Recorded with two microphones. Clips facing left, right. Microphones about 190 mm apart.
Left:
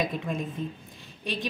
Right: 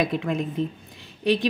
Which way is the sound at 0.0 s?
75° right (ahead or behind).